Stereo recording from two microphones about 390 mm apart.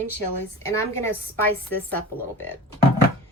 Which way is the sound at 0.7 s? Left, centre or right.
Centre.